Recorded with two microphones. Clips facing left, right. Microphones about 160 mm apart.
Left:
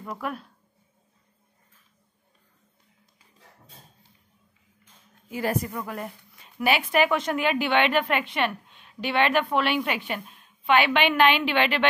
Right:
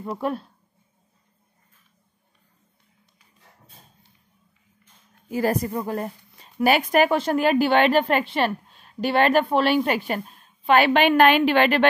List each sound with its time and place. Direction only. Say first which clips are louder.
0.0 s speech: right 6 dB; 30° right (ahead or behind)
5.3 s speech: right 5 dB; 40° right (ahead or behind)